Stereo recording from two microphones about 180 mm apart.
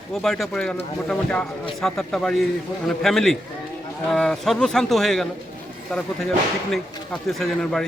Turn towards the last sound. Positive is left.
turn(degrees=0)  # may be behind; listen again after turning